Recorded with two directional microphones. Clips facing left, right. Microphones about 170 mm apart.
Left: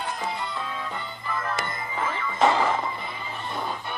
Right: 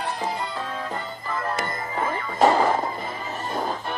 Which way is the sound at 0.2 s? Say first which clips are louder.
Right 2 dB; 40° right (ahead or behind).